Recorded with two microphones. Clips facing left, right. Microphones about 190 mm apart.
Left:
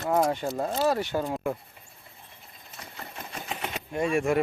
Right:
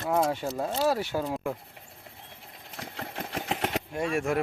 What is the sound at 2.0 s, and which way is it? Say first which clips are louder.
Engine: right 3 dB; 75° right (ahead or behind).